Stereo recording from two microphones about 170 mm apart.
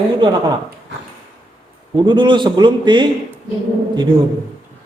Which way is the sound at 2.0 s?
30° right (ahead or behind).